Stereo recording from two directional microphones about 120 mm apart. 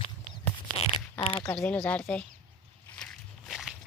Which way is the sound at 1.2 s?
50° left (ahead or behind).